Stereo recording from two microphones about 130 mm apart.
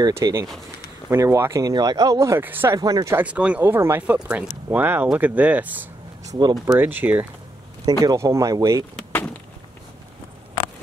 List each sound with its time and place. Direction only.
0.0 s speech: 25° right (ahead or behind)
2.8 s speech: 30° right (ahead or behind)
3.2 s speech: 10° right (ahead or behind)
6.2 s speech: 30° right (ahead or behind)
6.8 s speech: 15° right (ahead or behind)
7.8 s speech: 30° right (ahead or behind)
9.1 s a sound: 10° left (ahead or behind)